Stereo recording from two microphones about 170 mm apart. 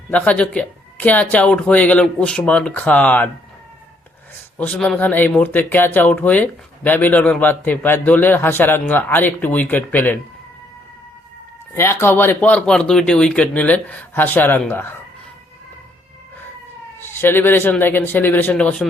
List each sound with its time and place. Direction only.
0.1 s speech: 10° left (ahead or behind)
4.5 s speech: 5° left (ahead or behind)
11.7 s speech: 15° left (ahead or behind)
17.0 s speech: 15° left (ahead or behind)